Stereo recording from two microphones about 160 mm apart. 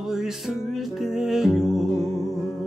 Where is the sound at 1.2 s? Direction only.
Centre (ahead or behind).